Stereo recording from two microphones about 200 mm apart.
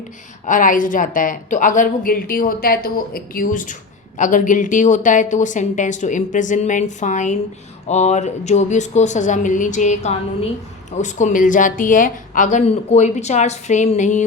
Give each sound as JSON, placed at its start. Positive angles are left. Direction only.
{"t": 0.4, "sound": "a woman's voice", "side_deg": 40}